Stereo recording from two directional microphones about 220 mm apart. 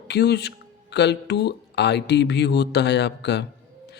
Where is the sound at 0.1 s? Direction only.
50° left (ahead or behind).